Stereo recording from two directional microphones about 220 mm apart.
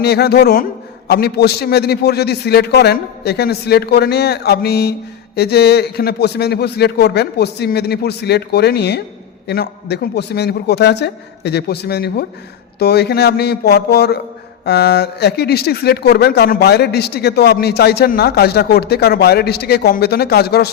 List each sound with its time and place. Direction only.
0.0 s speech: 45° left (ahead or behind)